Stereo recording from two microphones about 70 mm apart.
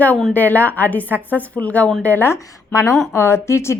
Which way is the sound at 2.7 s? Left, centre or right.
Left.